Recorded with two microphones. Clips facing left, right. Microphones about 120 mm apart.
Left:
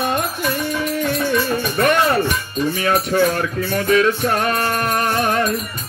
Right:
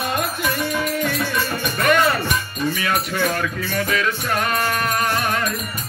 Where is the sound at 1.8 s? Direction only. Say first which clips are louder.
Left 2 dB; 40° left (ahead or behind).